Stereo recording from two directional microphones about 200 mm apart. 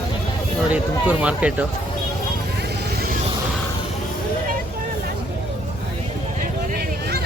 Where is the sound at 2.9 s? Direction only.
50° right (ahead or behind).